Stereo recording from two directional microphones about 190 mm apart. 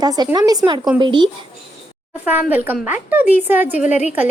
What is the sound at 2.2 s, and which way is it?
A woman's voice, 10° right (ahead or behind).